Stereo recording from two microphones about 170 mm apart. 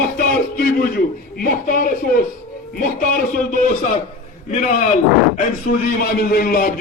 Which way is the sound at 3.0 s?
55° left (ahead or behind).